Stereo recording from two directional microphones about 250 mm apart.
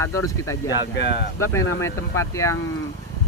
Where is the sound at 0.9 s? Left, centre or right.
Left.